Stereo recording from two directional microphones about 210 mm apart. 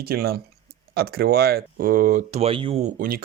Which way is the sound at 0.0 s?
45° right (ahead or behind).